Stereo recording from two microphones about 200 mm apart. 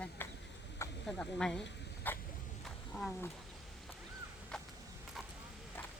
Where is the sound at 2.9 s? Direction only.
5° left (ahead or behind).